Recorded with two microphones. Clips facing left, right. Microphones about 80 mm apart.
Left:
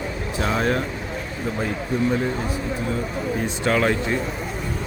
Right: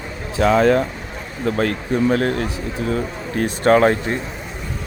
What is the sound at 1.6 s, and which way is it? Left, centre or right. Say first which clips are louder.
Speech: right 4 dB; right.